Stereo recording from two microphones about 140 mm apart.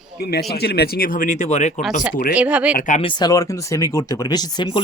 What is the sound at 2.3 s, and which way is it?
Speech, 10° right (ahead or behind).